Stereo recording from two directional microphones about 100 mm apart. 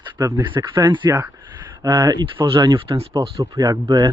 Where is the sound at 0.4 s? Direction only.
55° right (ahead or behind).